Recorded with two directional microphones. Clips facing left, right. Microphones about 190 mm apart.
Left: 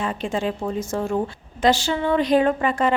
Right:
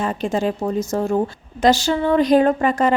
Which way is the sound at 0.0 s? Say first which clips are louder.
Right 4 dB; 40° right (ahead or behind).